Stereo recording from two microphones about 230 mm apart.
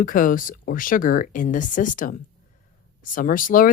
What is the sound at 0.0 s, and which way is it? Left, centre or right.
Speech, left.